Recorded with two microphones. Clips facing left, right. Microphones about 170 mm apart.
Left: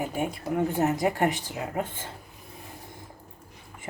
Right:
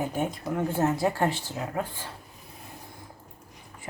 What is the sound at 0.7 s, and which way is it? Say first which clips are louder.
Speech: right 2 dB; 15° left (ahead or behind).